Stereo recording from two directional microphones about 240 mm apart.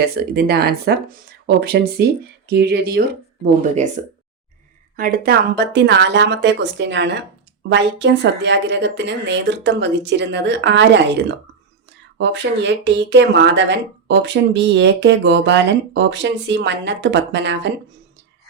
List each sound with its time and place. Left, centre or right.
0.0 s speech: right